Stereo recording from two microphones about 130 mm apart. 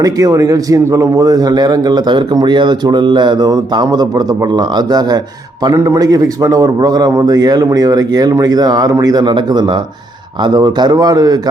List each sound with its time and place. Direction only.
0.0 s a man's voice: 30° right (ahead or behind)